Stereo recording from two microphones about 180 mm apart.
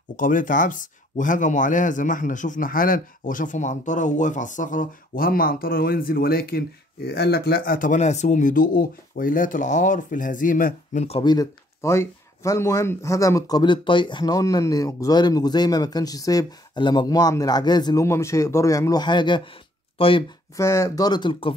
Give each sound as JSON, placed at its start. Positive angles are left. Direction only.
{"t": 0.1, "sound": "speech", "side_deg": 50}
{"t": 20.5, "sound": "speech", "side_deg": 15}